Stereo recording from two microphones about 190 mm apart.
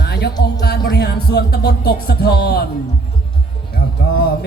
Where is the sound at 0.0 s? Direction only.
55° left (ahead or behind).